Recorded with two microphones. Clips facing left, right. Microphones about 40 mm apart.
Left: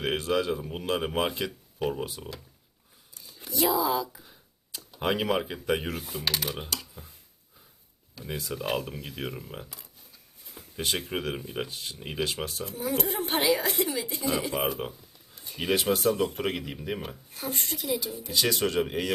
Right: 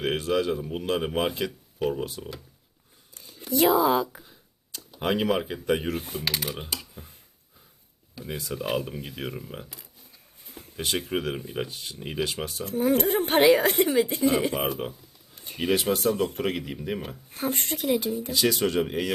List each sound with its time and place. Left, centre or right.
0.0 s speech: centre
3.5 s speech: right
4.2 s a sound: centre
6.0 s speech: right
6.2 s speech: centre
6.7 s computer keyboard: centre
8.1 s speech: centre
12.7 s speech: right
14.2 s speech: right
14.5 s speech: centre
15.4 s a sound: right
15.6 s speech: centre
17.3 s speech: right
18.3 s speech: centre